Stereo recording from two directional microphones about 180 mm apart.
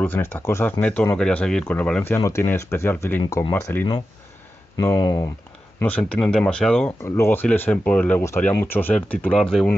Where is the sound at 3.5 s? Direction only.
10° left (ahead or behind).